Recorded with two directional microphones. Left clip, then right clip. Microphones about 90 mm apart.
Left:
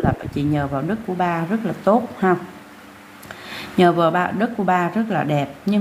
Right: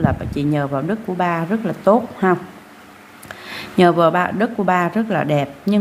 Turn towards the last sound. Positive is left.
turn(degrees=-35)  # may be behind; listen again after turning